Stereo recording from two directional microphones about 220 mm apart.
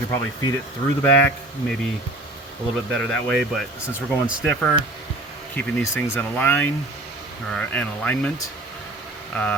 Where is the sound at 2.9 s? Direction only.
Centre (ahead or behind).